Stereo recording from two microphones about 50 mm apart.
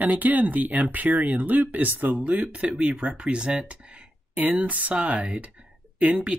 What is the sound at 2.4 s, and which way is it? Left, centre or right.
Speech, centre.